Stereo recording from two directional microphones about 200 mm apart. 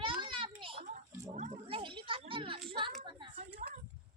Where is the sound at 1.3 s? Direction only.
35° right (ahead or behind).